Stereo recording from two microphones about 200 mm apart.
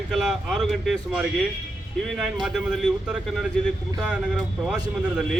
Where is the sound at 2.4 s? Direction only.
Centre (ahead or behind).